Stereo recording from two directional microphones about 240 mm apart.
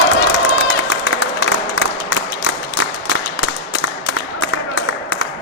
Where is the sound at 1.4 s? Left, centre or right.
Left.